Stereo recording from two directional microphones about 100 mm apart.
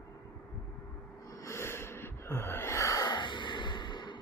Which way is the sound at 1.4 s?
25° left (ahead or behind).